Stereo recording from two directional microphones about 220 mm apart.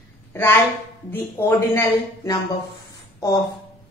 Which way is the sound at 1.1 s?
10° left (ahead or behind).